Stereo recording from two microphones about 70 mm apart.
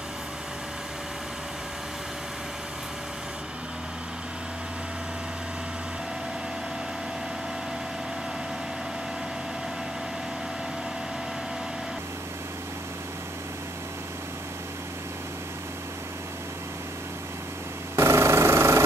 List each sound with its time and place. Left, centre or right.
17.9 s jackhammer: right